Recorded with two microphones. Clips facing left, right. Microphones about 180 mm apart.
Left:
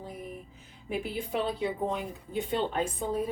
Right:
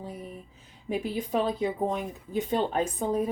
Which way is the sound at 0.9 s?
40° right (ahead or behind).